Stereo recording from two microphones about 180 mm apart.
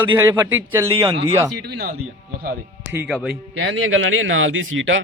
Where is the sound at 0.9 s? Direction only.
30° right (ahead or behind).